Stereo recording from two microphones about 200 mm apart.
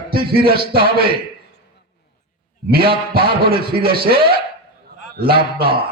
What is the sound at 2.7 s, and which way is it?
A man's voice, 50° right (ahead or behind).